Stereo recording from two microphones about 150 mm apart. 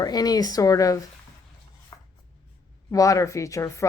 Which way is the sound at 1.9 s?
30° left (ahead or behind).